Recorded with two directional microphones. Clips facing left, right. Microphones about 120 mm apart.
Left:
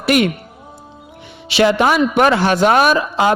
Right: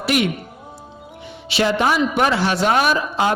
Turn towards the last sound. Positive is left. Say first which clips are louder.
# left 4 dB
turn(degrees=80)